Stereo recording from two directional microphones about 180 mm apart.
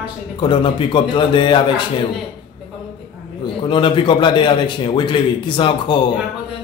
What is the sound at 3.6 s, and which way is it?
A man's voice, 30° left (ahead or behind).